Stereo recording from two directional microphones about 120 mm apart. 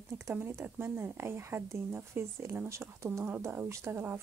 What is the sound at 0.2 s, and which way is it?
Speech, 15° right (ahead or behind).